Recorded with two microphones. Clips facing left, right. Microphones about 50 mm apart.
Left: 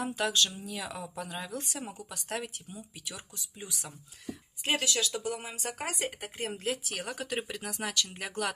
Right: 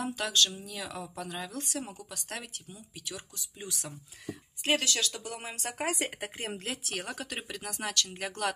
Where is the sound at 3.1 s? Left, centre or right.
Left.